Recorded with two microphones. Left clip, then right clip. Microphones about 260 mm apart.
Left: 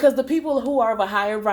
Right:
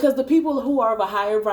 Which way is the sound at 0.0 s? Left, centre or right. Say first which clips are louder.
Even; left.